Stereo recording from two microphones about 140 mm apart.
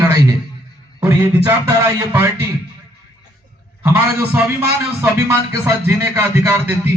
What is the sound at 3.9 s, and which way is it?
Music, 15° right (ahead or behind).